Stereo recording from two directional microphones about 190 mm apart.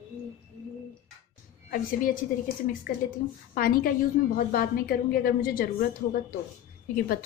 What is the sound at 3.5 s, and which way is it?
A woman's voice, 50° left (ahead or behind).